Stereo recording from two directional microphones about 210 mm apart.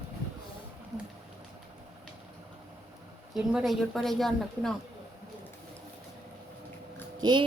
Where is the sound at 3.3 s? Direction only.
Centre (ahead or behind).